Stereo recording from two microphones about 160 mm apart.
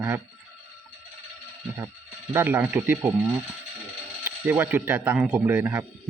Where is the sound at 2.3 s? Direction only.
15° right (ahead or behind).